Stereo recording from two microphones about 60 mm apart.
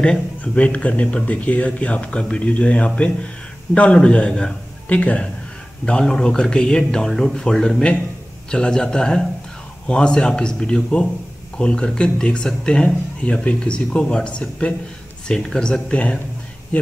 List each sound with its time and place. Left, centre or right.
0.4 s speech: left
15.9 s speech: left